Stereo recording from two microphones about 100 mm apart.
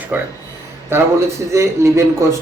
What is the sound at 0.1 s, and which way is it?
Speech, 20° right (ahead or behind).